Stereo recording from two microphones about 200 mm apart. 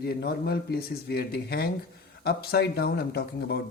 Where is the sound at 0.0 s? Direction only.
50° left (ahead or behind).